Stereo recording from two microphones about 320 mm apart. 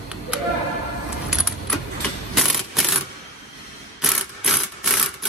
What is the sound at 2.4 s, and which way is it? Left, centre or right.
Coin, centre.